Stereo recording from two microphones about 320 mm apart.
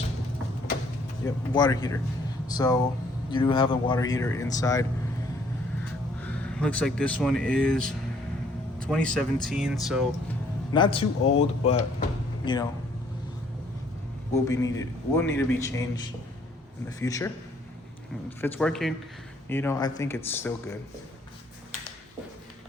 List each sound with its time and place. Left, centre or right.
1.2 s a man's voice: centre
6.2 s speech: centre
10.7 s a man's voice: centre
14.4 s a man's voice: centre
18.3 s a man's voice: centre